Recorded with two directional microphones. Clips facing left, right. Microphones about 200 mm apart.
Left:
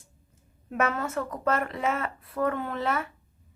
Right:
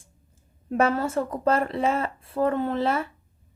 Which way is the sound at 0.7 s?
30° right (ahead or behind).